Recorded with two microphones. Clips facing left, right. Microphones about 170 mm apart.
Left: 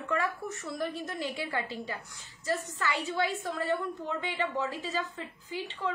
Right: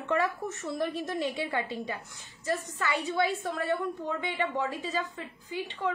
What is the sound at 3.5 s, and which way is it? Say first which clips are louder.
A woman's voice: right 1 dB; 20° right (ahead or behind).